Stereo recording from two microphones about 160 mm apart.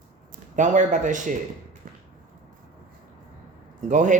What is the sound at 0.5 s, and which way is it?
Speech, 50° right (ahead or behind).